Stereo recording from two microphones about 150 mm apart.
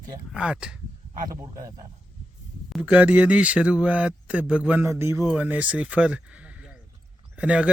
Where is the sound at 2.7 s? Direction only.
10° right (ahead or behind).